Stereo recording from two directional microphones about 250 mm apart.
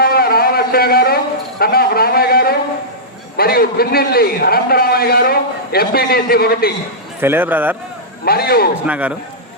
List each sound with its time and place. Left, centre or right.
0.0 s a sound: left
3.3 s a man's voice: left
7.2 s a man's voice: centre
8.2 s a man's voice: left
8.9 s a man's voice: centre